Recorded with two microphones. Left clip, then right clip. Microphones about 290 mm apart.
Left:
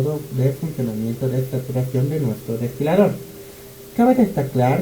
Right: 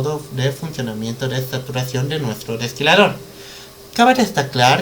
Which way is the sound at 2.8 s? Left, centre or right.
Centre.